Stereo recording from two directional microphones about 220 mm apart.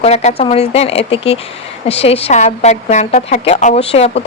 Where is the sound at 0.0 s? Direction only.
30° left (ahead or behind).